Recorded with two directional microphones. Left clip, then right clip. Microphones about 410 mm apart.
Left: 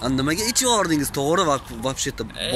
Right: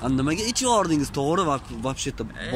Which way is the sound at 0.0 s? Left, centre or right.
Centre.